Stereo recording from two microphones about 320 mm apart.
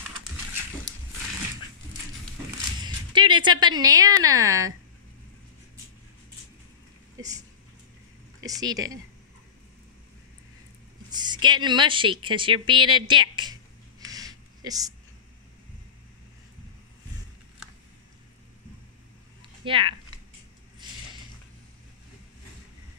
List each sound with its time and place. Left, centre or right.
2.8 s speech: centre
7.2 s speech: centre
8.5 s speech: centre
11.1 s speech: centre
12.6 s a sound: centre
19.6 s speech: centre